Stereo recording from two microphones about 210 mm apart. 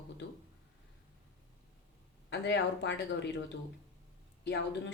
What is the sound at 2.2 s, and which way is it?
Speech, 55° left (ahead or behind).